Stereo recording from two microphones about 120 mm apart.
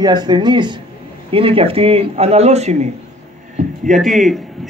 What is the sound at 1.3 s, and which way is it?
A man's voice, 50° right (ahead or behind).